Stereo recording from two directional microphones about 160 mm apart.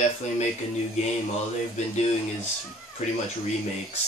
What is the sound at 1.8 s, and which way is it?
Speech, 45° left (ahead or behind).